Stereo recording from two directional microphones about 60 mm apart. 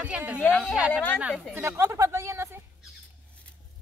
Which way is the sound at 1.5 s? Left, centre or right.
Right.